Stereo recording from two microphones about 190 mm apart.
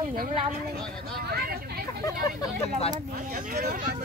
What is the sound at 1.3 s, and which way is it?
Vehicle, 55° right (ahead or behind).